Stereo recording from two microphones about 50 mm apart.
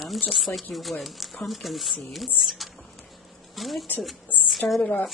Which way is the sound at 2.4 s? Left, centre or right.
Centre.